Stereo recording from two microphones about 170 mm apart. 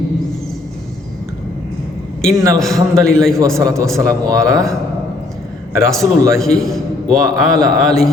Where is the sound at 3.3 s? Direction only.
15° right (ahead or behind).